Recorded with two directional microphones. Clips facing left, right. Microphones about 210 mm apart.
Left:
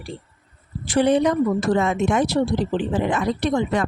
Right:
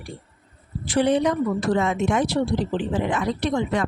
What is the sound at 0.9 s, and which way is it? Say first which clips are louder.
Speech: left 2 dB; 45° left (ahead or behind).